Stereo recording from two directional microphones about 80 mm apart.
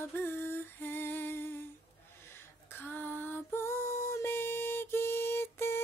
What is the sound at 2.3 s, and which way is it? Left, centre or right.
Lullaby, left.